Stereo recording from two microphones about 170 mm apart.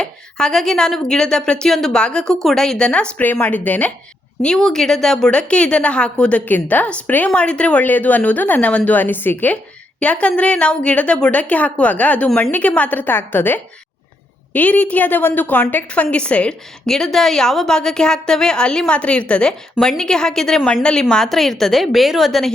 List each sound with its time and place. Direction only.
0.0 s a woman's voice: 5° left (ahead or behind)